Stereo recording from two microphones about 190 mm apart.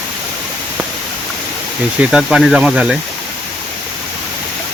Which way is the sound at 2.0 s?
5° right (ahead or behind).